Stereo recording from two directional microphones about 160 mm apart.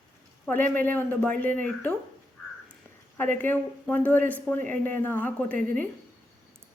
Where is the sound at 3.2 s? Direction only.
15° left (ahead or behind).